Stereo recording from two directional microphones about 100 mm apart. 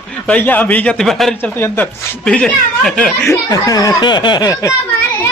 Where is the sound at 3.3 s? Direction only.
35° left (ahead or behind).